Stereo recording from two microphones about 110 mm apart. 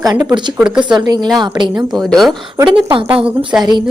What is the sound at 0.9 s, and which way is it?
Speech, 40° right (ahead or behind).